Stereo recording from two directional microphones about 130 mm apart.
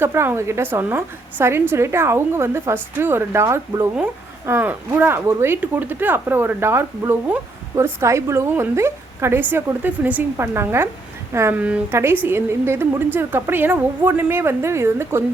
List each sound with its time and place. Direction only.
0.0 s a woman's voice: 20° right (ahead or behind)